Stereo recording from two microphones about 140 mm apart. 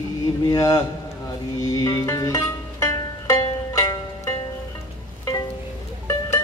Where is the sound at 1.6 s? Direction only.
25° left (ahead or behind).